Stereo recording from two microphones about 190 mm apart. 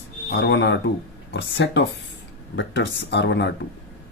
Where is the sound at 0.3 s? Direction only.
65° left (ahead or behind).